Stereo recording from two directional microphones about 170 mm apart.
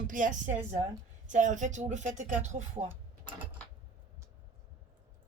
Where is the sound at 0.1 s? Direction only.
50° right (ahead or behind).